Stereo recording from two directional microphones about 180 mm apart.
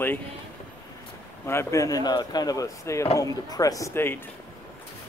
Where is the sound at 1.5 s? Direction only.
15° left (ahead or behind).